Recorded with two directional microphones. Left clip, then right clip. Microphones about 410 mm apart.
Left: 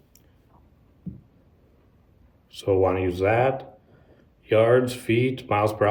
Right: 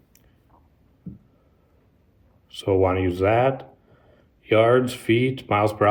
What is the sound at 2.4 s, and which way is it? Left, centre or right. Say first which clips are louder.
Speech: right 1 dB; centre.